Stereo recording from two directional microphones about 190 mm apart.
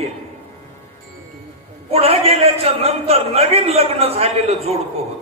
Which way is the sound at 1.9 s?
30° right (ahead or behind).